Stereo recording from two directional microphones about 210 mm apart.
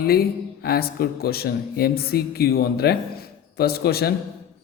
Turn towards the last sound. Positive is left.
turn(degrees=50)  # may be behind; listen again after turning